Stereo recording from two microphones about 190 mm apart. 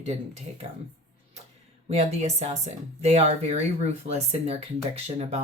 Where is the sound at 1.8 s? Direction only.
35° right (ahead or behind).